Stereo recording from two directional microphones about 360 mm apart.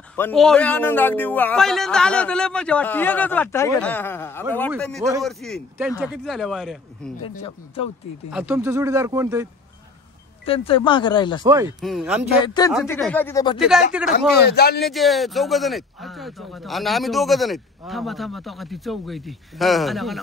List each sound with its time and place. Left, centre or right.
0.1 s speech: centre
7.2 s speech: centre
8.3 s speech: centre
10.4 s speech: centre
11.4 s speech: centre
12.4 s speech: centre
13.6 s speech: centre
14.4 s a man's voice: left
14.9 s speech: centre